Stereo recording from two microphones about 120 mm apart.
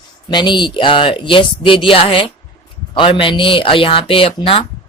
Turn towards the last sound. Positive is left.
turn(degrees=50)  # may be behind; listen again after turning